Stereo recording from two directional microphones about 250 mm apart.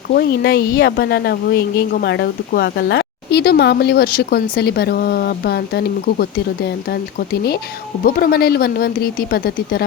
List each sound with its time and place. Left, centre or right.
0.1 s speech: left